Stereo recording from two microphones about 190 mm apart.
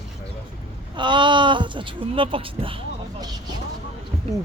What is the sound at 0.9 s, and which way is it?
Speech, 25° right (ahead or behind).